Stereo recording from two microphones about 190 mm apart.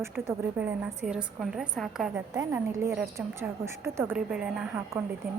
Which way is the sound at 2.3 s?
20° right (ahead or behind).